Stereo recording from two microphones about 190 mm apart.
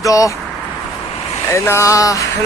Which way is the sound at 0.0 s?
15° left (ahead or behind).